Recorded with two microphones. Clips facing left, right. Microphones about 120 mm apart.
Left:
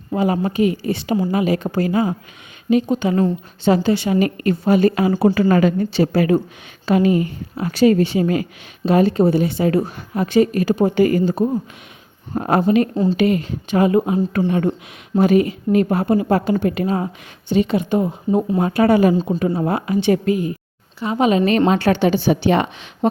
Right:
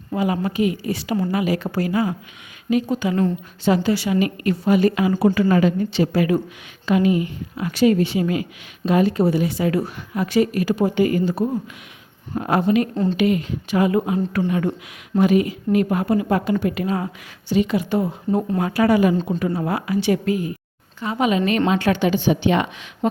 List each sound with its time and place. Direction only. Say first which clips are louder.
0.1 s a woman's voice: left 3 dB; 30° left (ahead or behind)
21.2 s a woman's voice: left 4 dB; 35° left (ahead or behind)